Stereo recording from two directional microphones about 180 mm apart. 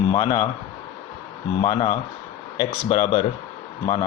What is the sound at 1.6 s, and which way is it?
A man's voice, 30° left (ahead or behind).